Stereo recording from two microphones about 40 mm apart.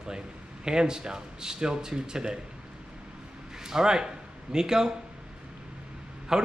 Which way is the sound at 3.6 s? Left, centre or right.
Centre.